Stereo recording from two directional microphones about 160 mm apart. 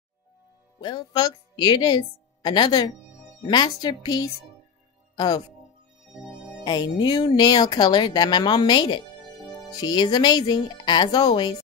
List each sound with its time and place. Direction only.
0.7 s a woman's voice: 25° left (ahead or behind)
6.6 s speech: 25° left (ahead or behind)